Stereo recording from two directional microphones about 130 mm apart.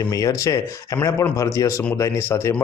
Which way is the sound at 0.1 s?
25° left (ahead or behind).